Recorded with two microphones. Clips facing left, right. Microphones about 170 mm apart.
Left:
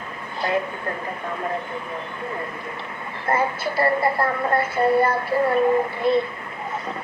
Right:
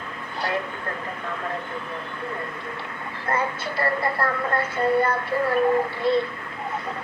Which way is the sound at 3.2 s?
25° left (ahead or behind).